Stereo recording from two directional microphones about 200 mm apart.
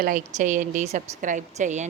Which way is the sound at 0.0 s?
40° right (ahead or behind).